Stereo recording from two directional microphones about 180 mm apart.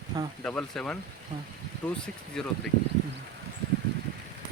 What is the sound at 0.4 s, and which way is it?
Speech, 5° left (ahead or behind).